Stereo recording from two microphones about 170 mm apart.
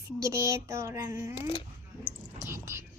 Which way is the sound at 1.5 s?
30° left (ahead or behind).